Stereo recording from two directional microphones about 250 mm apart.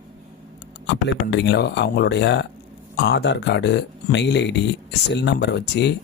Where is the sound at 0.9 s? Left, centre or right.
Left.